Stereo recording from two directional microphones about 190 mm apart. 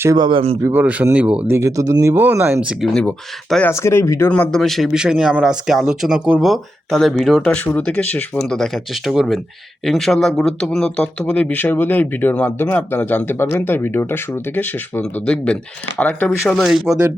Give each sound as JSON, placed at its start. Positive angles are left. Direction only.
{"t": 0.0, "sound": "speech", "side_deg": -15}
{"t": 0.3, "sound": "speech", "side_deg": -30}
{"t": 0.6, "sound": "speech", "side_deg": -10}
{"t": 2.9, "sound": "speech", "side_deg": 5}
{"t": 4.3, "sound": "a man's voice", "side_deg": 5}